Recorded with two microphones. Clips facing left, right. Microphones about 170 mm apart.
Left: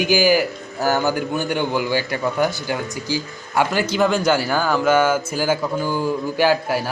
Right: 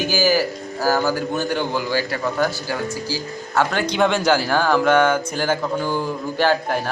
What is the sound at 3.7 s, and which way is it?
Speech, 5° left (ahead or behind).